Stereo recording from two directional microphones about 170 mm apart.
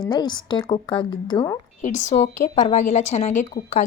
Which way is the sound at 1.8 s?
40° left (ahead or behind).